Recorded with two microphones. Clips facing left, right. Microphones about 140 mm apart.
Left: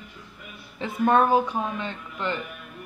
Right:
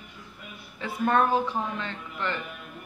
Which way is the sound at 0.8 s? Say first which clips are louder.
Left 3 dB; 15° left (ahead or behind).